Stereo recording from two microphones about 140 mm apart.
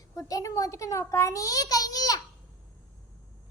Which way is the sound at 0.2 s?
25° left (ahead or behind).